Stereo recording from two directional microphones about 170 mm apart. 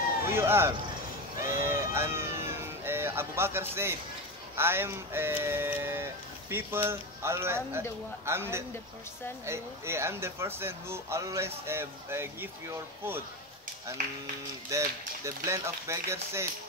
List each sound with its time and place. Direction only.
0.3 s speech: 15° right (ahead or behind)
1.5 s a sound: 15° right (ahead or behind)
4.6 s speech: 15° right (ahead or behind)
14.7 s speech: 20° right (ahead or behind)